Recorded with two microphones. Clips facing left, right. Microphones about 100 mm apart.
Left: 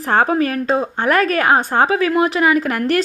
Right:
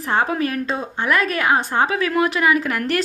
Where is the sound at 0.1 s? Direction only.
40° left (ahead or behind).